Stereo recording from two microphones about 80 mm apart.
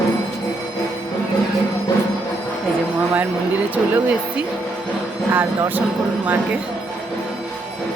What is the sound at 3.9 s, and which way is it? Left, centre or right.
Speech, centre.